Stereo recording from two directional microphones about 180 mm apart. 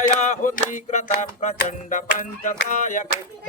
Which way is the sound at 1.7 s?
45° left (ahead or behind).